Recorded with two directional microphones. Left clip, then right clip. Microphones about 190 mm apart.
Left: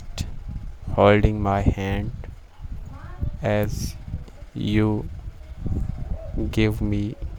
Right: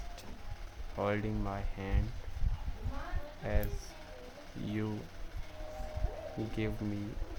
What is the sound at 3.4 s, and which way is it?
Speech, 55° left (ahead or behind).